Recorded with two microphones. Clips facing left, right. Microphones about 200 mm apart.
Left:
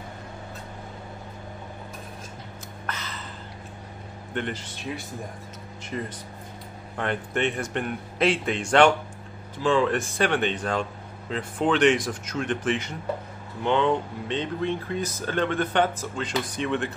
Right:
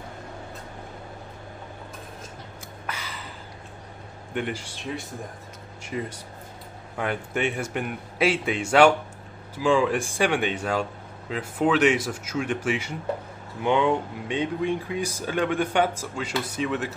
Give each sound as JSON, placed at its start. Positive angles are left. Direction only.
{"t": 2.9, "sound": "a sound", "side_deg": -10}
{"t": 4.3, "sound": "speech", "side_deg": -10}
{"t": 5.9, "sound": "speech", "side_deg": -10}